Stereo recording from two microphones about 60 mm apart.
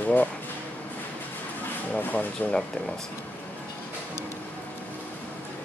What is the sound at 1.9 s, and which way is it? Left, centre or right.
Speech, left.